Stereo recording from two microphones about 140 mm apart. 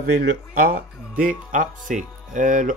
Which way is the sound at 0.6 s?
75° right (ahead or behind).